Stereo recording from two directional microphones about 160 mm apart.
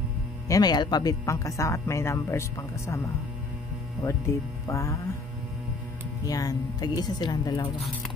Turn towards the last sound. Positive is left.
turn(degrees=25)  # may be behind; listen again after turning